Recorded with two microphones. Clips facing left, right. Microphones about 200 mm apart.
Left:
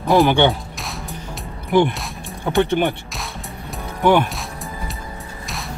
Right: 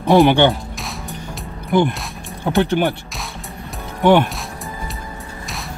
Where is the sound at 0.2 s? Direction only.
Centre (ahead or behind).